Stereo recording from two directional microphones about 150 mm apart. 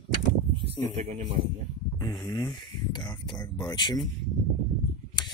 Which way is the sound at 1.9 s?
25° left (ahead or behind).